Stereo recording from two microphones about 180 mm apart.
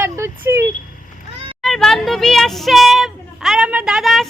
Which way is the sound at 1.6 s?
Centre (ahead or behind).